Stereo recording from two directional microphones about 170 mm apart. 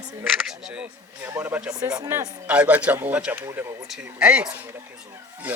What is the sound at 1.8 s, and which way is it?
Speech, 20° right (ahead or behind).